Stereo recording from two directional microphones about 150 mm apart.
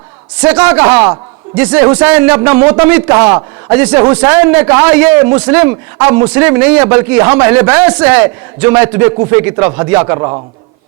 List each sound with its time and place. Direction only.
0.6 s a man's voice: 10° right (ahead or behind)
10.2 s a man's voice: 30° right (ahead or behind)